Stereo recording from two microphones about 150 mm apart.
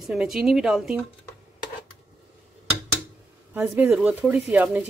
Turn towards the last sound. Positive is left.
turn(degrees=-5)  # may be behind; listen again after turning